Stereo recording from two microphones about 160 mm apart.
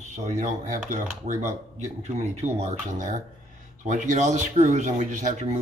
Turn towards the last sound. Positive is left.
turn(degrees=-50)  # may be behind; listen again after turning